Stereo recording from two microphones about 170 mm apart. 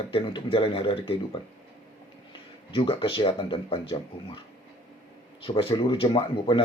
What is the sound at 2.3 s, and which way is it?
Speech, 30° left (ahead or behind).